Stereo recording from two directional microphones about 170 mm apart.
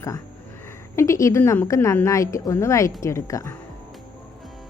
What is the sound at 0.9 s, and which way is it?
A woman's voice, 20° left (ahead or behind).